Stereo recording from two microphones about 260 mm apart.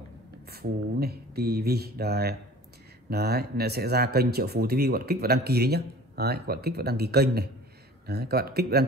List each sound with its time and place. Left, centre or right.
0.5 s speech: right